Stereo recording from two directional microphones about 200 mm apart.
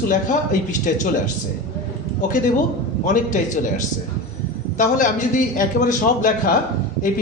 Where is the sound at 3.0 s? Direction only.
40° left (ahead or behind).